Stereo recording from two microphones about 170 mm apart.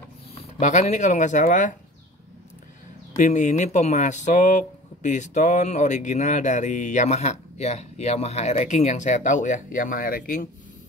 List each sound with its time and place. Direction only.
0.6 s speech: 45° left (ahead or behind)
3.2 s speech: 50° left (ahead or behind)